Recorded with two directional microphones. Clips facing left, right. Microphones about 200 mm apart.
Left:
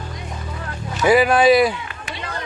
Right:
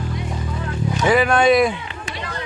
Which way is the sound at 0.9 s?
5° left (ahead or behind).